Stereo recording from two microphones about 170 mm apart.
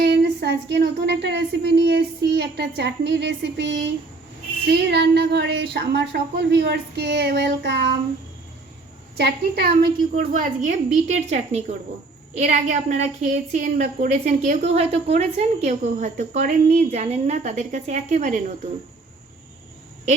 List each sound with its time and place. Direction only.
0.0 s a woman's voice: 85° right
9.1 s a woman's voice: 75° right (ahead or behind); by 18.5 s 45° right (ahead or behind)